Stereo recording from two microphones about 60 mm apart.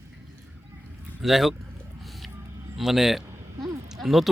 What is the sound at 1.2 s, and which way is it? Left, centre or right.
Speech, centre.